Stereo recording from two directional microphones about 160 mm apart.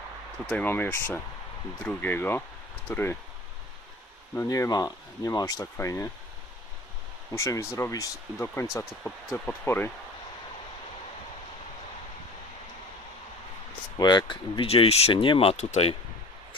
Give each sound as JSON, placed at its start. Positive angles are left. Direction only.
{"t": 0.4, "sound": "speech", "side_deg": 10}
{"t": 4.4, "sound": "speech", "side_deg": 20}
{"t": 7.3, "sound": "speech", "side_deg": 20}
{"t": 14.0, "sound": "speech", "side_deg": 25}